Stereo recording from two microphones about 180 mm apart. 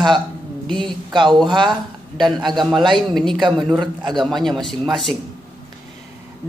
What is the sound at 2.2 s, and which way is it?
Speech, centre (ahead or behind).